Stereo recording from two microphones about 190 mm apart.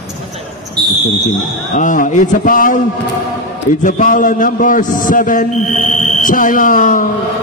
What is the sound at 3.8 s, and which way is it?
A man's voice, 45° left (ahead or behind).